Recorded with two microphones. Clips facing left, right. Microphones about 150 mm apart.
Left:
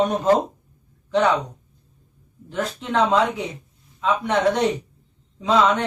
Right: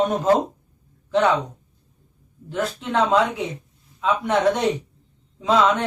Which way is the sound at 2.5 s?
5° right (ahead or behind).